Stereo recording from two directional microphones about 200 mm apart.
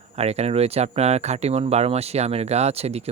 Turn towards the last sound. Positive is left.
turn(degrees=-30)  # may be behind; listen again after turning